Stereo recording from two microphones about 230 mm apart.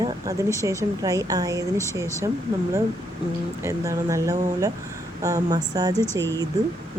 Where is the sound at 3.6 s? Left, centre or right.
Centre.